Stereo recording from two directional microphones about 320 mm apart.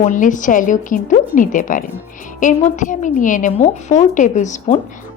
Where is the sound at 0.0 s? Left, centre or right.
Left.